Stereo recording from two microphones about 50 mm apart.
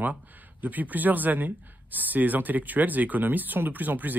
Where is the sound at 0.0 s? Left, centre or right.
Right.